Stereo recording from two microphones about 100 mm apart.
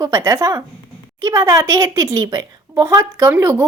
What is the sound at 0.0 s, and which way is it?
Speech, 35° right (ahead or behind).